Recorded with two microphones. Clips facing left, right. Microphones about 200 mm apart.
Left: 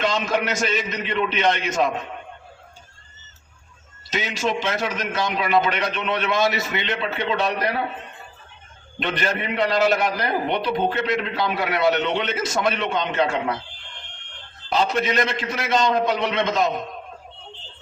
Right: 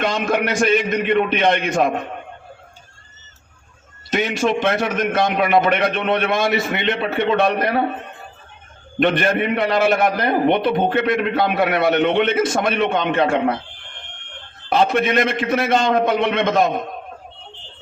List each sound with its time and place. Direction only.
0.0 s a man's voice: 55° right (ahead or behind)
4.1 s a man's voice: 55° right (ahead or behind)